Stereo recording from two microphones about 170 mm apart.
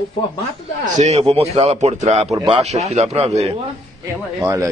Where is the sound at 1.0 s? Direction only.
40° right (ahead or behind).